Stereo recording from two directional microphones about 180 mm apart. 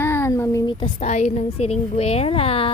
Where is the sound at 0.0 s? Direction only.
15° left (ahead or behind).